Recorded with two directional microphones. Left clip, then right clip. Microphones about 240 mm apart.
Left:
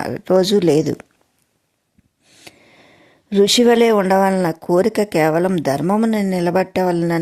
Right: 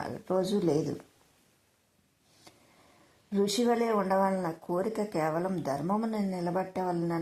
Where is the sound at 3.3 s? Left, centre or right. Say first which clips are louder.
Left 15 dB; left.